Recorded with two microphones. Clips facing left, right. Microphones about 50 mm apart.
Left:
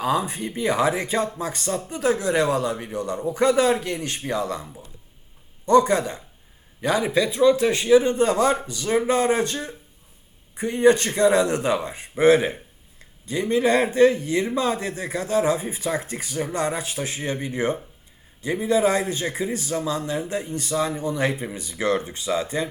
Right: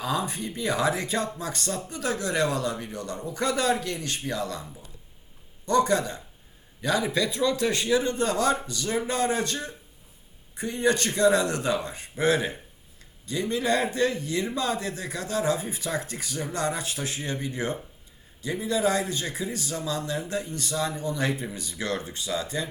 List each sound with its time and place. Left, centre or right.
0.0 s a man's voice: centre